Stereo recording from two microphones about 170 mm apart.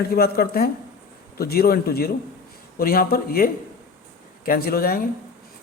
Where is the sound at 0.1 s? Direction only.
65° left (ahead or behind).